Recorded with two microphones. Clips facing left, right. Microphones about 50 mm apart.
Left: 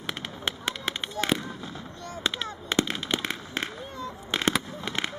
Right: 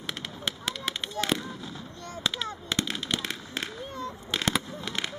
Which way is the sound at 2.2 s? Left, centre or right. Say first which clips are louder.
Left 1 dB; centre.